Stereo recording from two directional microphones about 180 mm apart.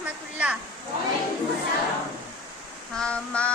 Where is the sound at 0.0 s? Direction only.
5° right (ahead or behind).